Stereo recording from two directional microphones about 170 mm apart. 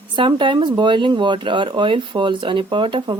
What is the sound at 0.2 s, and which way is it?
Speech, 30° right (ahead or behind).